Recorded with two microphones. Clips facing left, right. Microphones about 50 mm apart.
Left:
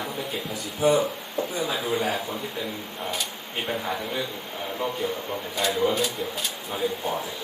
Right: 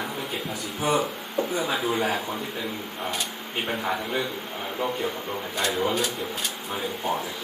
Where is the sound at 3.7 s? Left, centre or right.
Centre.